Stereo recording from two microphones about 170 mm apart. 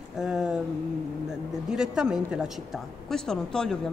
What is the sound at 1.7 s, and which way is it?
Speech, 5° right (ahead or behind).